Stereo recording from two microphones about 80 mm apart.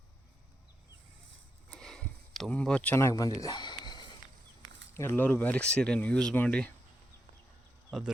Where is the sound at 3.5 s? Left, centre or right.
Left.